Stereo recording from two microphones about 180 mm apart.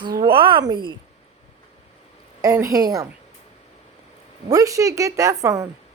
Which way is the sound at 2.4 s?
15° right (ahead or behind).